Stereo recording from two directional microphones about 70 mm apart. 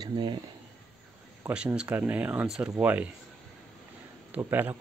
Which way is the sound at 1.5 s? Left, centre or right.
Centre.